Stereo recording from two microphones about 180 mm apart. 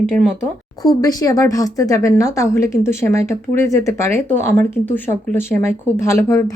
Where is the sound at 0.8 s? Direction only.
20° left (ahead or behind).